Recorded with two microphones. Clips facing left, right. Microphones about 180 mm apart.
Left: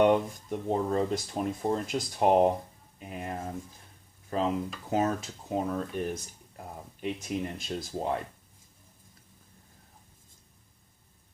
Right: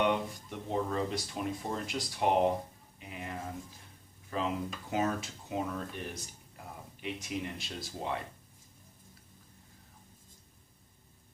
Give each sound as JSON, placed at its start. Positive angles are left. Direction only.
{"t": 0.0, "sound": "speech", "side_deg": 45}